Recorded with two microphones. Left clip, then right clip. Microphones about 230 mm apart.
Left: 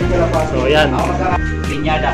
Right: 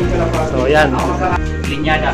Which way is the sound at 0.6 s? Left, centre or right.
Centre.